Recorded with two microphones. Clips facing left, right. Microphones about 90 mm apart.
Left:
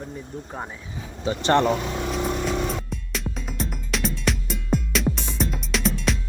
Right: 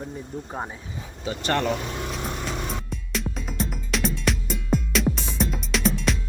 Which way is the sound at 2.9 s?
Centre (ahead or behind).